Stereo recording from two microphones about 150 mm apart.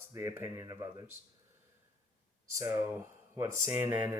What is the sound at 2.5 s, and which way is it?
Speech, 20° right (ahead or behind).